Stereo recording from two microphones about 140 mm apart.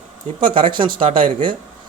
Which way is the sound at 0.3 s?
35° right (ahead or behind).